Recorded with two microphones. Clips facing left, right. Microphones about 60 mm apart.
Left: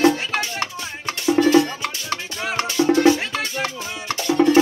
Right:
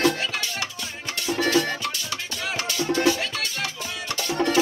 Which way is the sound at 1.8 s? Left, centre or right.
Left.